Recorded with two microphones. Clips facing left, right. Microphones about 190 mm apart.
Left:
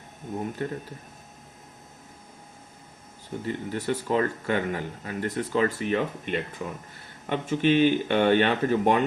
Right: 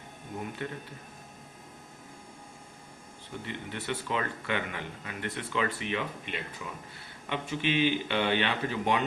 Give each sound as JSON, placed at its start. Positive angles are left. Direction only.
{"t": 0.6, "sound": "a man's voice", "side_deg": 40}
{"t": 3.4, "sound": "a man's voice", "side_deg": 40}